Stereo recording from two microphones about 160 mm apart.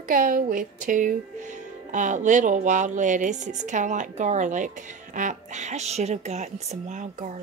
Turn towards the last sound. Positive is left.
turn(degrees=-50)  # may be behind; listen again after turning